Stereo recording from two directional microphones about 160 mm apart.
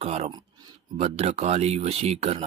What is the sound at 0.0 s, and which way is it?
Speech, 40° right (ahead or behind).